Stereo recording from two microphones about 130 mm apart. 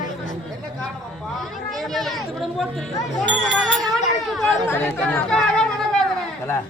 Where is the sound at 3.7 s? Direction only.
Centre (ahead or behind).